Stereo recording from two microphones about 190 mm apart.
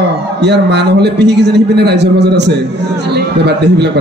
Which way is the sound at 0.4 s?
65° right (ahead or behind).